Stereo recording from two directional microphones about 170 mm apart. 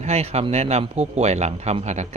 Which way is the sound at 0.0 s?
35° right (ahead or behind).